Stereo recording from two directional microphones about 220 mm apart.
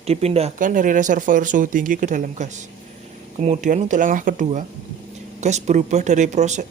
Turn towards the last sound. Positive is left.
turn(degrees=-30)  # may be behind; listen again after turning